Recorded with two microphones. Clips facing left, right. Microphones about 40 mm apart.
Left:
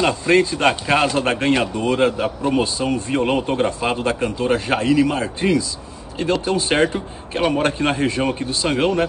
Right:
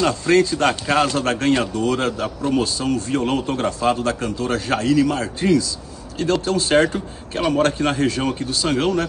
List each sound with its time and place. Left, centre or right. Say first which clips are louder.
0.0 s a man's voice: even; left